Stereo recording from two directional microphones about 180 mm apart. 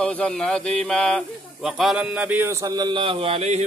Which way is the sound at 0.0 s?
5° left (ahead or behind).